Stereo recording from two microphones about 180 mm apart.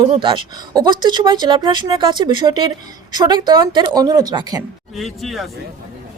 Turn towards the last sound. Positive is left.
turn(degrees=0)  # may be behind; listen again after turning